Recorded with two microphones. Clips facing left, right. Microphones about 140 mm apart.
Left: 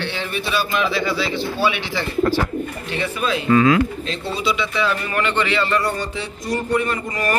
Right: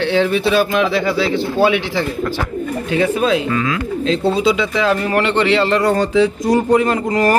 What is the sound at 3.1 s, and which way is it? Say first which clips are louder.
Speech: right 7 dB; 90° right.